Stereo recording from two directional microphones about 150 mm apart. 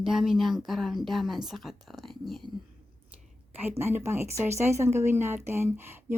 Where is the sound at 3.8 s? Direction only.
15° right (ahead or behind).